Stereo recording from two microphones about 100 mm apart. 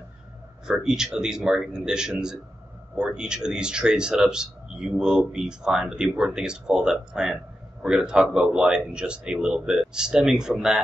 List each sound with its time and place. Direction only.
0.7 s speech: 5° right (ahead or behind)